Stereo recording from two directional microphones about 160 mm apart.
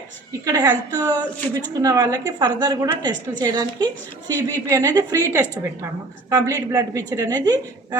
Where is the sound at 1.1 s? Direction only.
10° left (ahead or behind).